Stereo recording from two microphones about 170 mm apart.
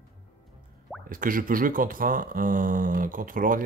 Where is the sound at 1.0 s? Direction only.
55° right (ahead or behind).